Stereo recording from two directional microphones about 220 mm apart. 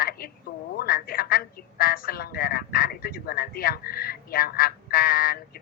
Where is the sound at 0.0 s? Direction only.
40° left (ahead or behind).